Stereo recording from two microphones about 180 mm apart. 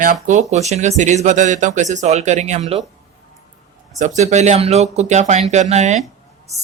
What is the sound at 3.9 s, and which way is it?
Speech, 40° right (ahead or behind).